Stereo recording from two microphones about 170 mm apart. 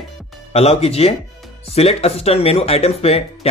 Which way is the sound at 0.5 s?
35° left (ahead or behind).